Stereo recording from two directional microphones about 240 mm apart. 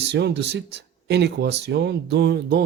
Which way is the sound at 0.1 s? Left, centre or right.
Right.